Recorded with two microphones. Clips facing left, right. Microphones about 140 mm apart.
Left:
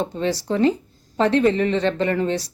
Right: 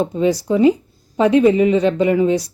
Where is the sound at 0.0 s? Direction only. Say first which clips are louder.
Right 6 dB; 10° right (ahead or behind).